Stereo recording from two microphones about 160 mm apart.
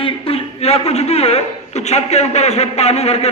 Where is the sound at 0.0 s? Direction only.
35° left (ahead or behind).